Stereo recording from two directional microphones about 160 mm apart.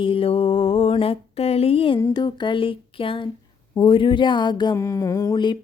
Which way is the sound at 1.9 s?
25° left (ahead or behind).